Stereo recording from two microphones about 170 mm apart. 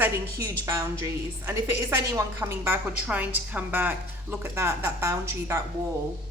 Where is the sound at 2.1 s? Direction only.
20° right (ahead or behind).